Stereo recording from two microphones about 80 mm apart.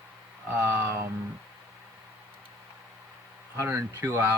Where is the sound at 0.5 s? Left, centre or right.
Right.